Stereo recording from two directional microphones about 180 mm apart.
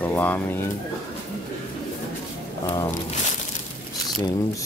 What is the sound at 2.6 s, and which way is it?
Speech, 25° left (ahead or behind).